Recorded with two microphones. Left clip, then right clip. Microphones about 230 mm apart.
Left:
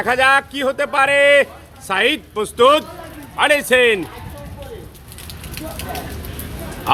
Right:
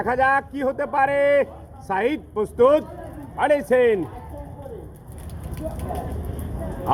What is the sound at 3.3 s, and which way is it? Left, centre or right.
Speech, centre.